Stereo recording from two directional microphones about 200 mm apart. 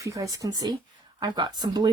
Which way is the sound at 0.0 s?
15° right (ahead or behind).